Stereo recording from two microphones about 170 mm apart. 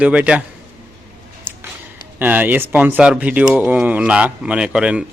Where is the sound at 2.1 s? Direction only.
10° right (ahead or behind).